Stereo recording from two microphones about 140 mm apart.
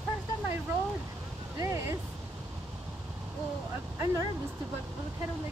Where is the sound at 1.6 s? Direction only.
20° right (ahead or behind).